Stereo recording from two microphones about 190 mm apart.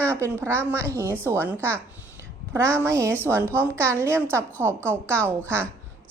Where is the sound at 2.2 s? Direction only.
5° left (ahead or behind).